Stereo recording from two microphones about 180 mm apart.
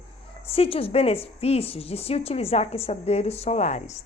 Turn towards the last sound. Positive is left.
turn(degrees=40)  # may be behind; listen again after turning